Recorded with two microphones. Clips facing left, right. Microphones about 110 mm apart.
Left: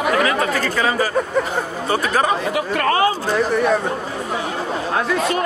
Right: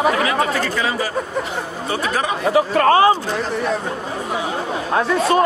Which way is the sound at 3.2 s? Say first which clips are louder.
Left 4 dB; 55° left (ahead or behind).